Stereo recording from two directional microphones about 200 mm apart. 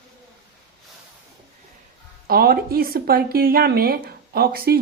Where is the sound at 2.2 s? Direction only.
50° right (ahead or behind).